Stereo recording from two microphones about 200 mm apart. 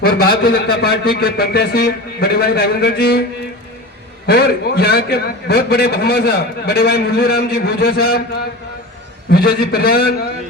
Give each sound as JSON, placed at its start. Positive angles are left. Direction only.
{"t": 0.0, "sound": "a man's voice", "side_deg": 50}
{"t": 4.3, "sound": "a man's voice", "side_deg": 55}
{"t": 9.3, "sound": "a man's voice", "side_deg": 50}